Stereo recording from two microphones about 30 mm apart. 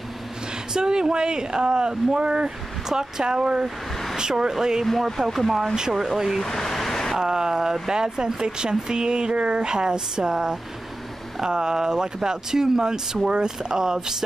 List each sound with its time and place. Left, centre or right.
0.7 s speech: right
2.1 s speech: right
2.9 s speech: centre
3.3 s speech: right
4.9 s speech: centre
5.9 s speech: centre
6.4 s a sound: centre
7.2 s speech: right